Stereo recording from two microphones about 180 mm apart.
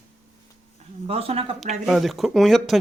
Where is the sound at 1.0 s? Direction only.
35° right (ahead or behind).